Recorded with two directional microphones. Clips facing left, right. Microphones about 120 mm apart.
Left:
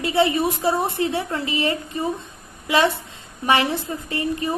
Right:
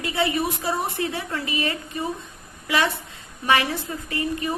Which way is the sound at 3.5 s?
25° left (ahead or behind).